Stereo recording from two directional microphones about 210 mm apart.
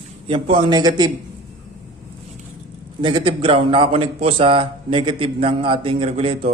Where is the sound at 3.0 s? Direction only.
25° right (ahead or behind).